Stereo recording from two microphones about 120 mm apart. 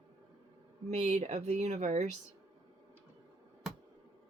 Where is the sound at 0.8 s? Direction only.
75° right (ahead or behind).